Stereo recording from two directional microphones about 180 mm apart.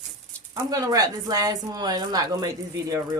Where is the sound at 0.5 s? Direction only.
20° right (ahead or behind).